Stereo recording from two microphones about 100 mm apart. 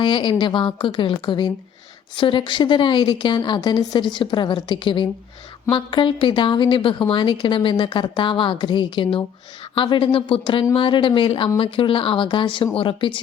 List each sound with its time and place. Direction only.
0.0 s a woman's voice: 55° left (ahead or behind)